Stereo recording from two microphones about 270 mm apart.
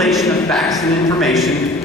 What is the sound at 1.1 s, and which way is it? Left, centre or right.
Speech, centre.